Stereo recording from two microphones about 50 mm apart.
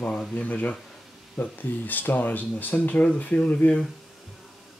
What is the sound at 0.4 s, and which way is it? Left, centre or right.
Speech, left.